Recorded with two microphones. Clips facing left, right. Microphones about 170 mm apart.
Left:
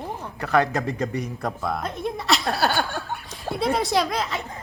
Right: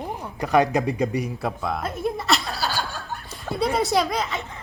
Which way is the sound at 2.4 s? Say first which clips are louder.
Left 6 dB; 60° left (ahead or behind).